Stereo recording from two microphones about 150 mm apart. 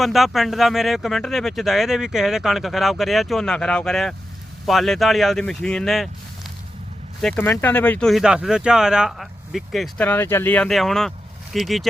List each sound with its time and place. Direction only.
0.0 s speech: centre (ahead or behind)
7.2 s speech: 10° left (ahead or behind)
10.0 s speech: 15° left (ahead or behind)